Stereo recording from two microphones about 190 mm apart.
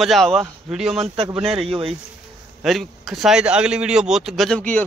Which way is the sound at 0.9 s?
30° right (ahead or behind).